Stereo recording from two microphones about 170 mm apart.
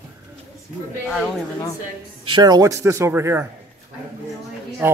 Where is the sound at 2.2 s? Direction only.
25° right (ahead or behind).